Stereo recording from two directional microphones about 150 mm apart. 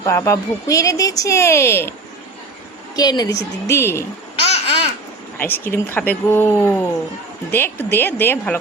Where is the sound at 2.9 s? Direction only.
25° left (ahead or behind).